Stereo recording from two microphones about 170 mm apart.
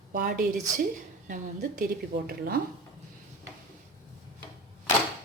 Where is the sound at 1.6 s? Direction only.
60° right (ahead or behind).